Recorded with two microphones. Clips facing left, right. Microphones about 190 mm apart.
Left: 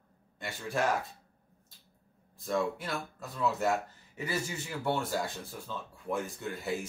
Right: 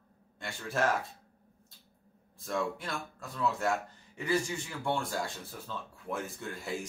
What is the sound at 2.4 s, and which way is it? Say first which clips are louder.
Speech: left 2 dB; centre (ahead or behind).